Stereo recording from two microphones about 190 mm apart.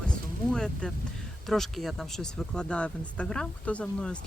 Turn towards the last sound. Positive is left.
turn(degrees=5)  # may be behind; listen again after turning